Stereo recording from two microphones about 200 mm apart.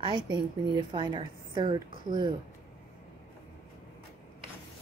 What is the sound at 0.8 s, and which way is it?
Speech, 25° right (ahead or behind).